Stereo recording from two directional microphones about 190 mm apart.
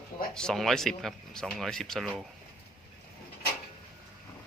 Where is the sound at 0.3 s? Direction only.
5° left (ahead or behind).